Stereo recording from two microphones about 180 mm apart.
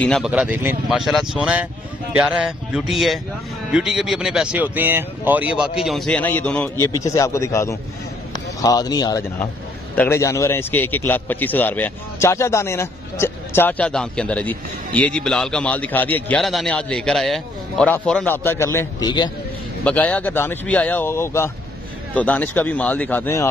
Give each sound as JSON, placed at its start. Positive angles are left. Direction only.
{"t": 0.0, "sound": "speech", "side_deg": 5}
{"t": 0.3, "sound": "speech", "side_deg": -10}
{"t": 6.8, "sound": "a man's voice", "side_deg": 15}
{"t": 19.8, "sound": "a man's voice", "side_deg": 5}